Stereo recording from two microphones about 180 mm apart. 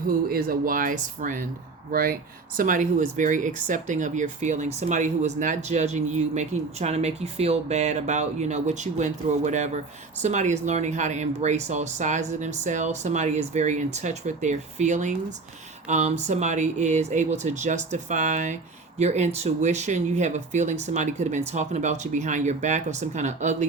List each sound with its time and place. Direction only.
0.1 s speech: 55° right (ahead or behind)